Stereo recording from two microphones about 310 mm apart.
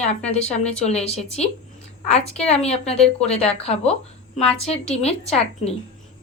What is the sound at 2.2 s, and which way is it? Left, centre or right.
A woman's voice, centre.